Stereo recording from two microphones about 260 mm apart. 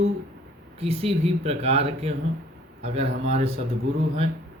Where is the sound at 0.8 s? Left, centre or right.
Right.